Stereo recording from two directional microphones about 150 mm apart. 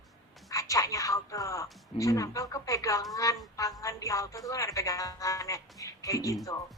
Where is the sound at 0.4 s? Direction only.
20° left (ahead or behind).